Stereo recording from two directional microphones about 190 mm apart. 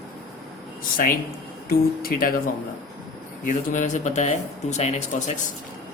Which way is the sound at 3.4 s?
40° left (ahead or behind).